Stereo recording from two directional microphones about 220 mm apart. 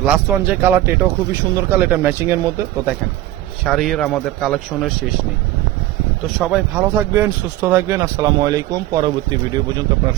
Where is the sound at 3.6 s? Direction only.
Centre (ahead or behind).